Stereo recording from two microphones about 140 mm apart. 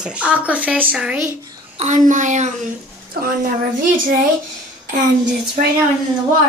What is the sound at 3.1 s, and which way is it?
Speech, 90° right.